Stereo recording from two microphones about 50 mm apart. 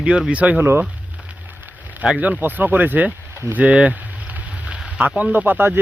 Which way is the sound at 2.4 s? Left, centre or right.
Right.